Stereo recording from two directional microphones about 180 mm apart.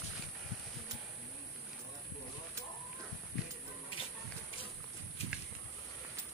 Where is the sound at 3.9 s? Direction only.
30° left (ahead or behind).